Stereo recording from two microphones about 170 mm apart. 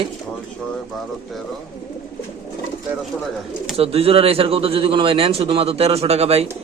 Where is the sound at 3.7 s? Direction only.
35° right (ahead or behind).